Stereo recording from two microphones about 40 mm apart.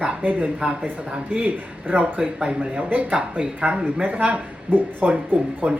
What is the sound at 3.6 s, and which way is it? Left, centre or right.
A woman's voice, right.